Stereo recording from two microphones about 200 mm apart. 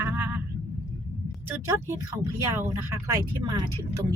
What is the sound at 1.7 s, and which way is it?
Speech, 15° right (ahead or behind).